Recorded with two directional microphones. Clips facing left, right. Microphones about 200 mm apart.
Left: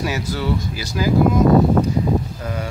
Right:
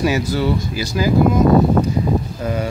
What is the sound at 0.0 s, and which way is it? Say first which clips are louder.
Speech: right 5 dB; 10° right (ahead or behind).